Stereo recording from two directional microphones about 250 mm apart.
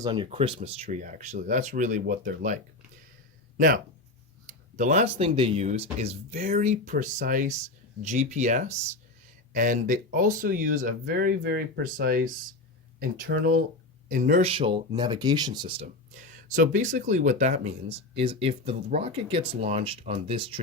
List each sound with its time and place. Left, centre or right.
0.0 s speech: centre
4.4 s speech: right
16.5 s speech: right